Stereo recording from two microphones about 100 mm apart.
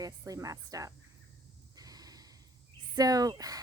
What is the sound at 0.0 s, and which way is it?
Speech, 35° right (ahead or behind).